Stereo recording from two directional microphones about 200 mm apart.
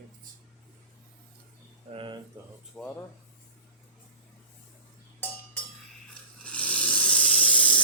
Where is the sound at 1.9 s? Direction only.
25° right (ahead or behind).